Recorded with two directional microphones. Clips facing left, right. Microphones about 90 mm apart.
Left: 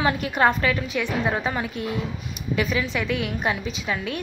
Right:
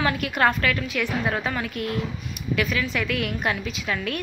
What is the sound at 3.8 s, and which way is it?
Speech, 15° left (ahead or behind).